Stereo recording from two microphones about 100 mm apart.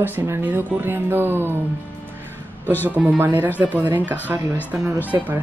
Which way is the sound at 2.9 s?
15° right (ahead or behind).